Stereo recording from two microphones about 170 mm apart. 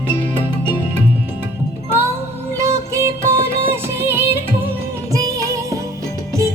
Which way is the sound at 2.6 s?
15° right (ahead or behind).